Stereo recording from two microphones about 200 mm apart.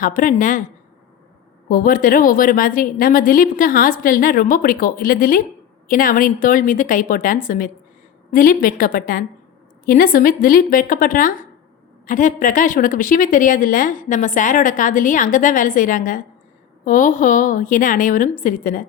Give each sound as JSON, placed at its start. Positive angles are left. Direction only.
{"t": 0.0, "sound": "a woman's voice", "side_deg": 40}
{"t": 1.7, "sound": "a woman's voice", "side_deg": 45}